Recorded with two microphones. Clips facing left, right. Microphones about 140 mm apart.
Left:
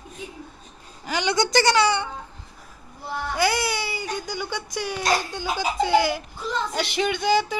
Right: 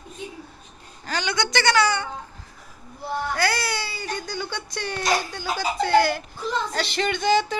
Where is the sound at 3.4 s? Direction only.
15° left (ahead or behind).